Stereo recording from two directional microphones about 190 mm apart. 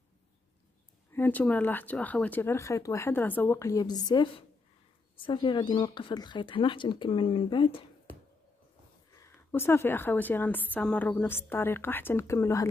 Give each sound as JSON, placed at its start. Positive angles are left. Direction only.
{"t": 1.1, "sound": "a woman's voice", "side_deg": 10}
{"t": 9.1, "sound": "a woman's voice", "side_deg": 15}